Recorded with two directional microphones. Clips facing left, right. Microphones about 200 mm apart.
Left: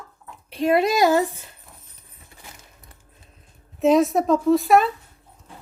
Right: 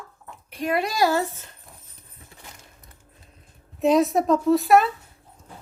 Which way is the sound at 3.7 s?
Centre (ahead or behind).